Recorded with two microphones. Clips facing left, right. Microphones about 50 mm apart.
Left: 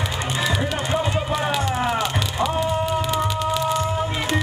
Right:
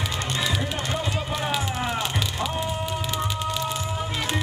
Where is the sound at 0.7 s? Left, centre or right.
Left.